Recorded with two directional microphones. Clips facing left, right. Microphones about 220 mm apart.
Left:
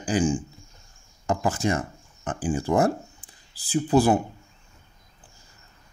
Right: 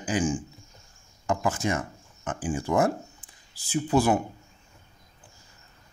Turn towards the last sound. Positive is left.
turn(degrees=35)  # may be behind; listen again after turning